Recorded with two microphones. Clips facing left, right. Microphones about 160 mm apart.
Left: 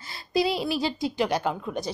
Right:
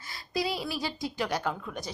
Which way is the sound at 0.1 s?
25° left (ahead or behind).